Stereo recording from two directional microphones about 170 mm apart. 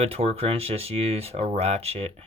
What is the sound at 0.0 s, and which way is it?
Speech, 35° right (ahead or behind).